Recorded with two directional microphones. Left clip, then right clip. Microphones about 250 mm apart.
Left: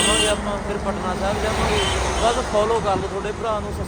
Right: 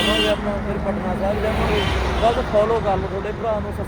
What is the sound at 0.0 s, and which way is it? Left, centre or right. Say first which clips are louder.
Speech: even; left.